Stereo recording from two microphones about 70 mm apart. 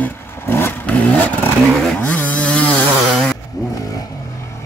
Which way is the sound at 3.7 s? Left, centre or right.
Left.